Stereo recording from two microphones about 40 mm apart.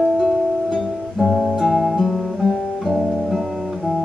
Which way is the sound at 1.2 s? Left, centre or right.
Centre.